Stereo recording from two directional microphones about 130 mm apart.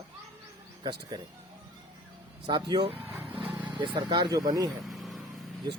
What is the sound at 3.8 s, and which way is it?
Speech, 40° right (ahead or behind).